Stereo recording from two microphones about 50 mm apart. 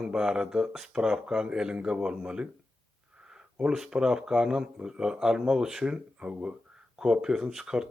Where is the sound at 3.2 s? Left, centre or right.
Centre.